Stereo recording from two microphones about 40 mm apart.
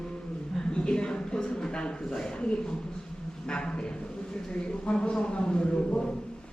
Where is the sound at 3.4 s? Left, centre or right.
Left.